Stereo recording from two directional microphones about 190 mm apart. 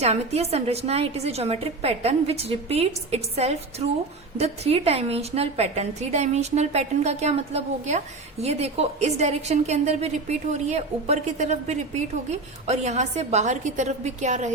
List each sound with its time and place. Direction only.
0.0 s a woman's voice: 35° right (ahead or behind)